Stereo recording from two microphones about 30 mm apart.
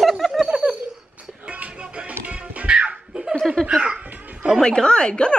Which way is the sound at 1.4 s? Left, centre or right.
Right.